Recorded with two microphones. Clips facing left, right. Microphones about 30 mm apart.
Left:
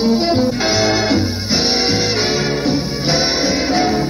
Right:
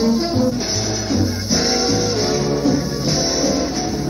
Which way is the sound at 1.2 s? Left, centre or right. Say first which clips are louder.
Left 1 dB; left.